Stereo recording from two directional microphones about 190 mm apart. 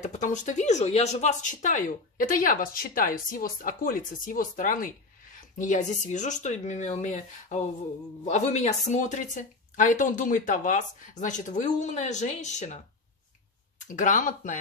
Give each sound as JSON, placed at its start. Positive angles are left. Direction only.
{"t": 0.0, "sound": "speech", "side_deg": 40}